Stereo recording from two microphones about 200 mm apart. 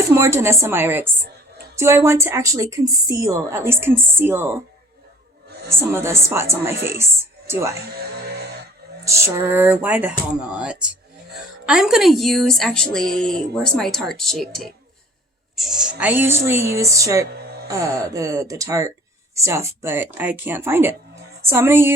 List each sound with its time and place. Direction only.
0.1 s speech: 15° right (ahead or behind)
5.7 s speech: 15° right (ahead or behind)
7.0 s music: 10° right (ahead or behind)
7.9 s music: 50° right (ahead or behind)
9.0 s speech: 15° right (ahead or behind)